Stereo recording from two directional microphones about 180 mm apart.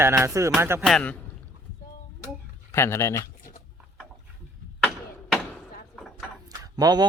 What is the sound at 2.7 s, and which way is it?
Speech, 15° left (ahead or behind).